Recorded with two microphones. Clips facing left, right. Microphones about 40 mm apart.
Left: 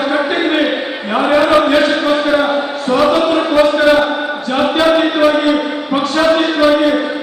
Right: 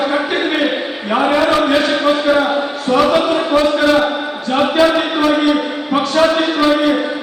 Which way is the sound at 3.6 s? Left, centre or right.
Centre.